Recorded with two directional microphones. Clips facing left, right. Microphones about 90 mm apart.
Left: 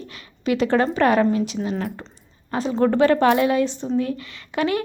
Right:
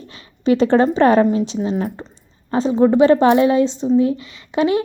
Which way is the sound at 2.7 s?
15° right (ahead or behind).